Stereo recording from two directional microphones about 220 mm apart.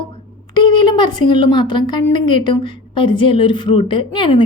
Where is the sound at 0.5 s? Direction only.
20° left (ahead or behind).